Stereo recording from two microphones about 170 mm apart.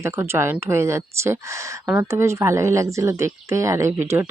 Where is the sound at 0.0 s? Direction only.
15° right (ahead or behind).